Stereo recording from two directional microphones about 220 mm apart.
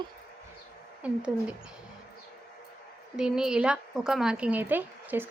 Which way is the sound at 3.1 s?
5° right (ahead or behind).